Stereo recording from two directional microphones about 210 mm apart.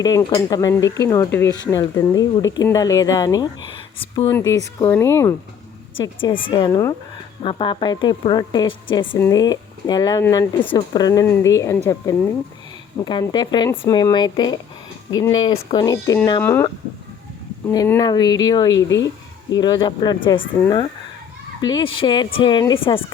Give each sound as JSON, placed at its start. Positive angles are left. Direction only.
{"t": 0.0, "sound": "speech", "side_deg": 15}
{"t": 4.3, "sound": "speech", "side_deg": 15}
{"t": 6.0, "sound": "a woman's voice", "side_deg": 25}
{"t": 13.0, "sound": "a woman's voice", "side_deg": 15}
{"t": 17.7, "sound": "a woman's voice", "side_deg": 15}
{"t": 18.9, "sound": "a sound", "side_deg": 60}
{"t": 19.5, "sound": "a woman's voice", "side_deg": 20}